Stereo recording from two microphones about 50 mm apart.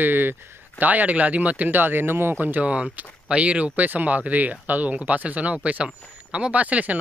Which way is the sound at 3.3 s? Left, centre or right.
Right.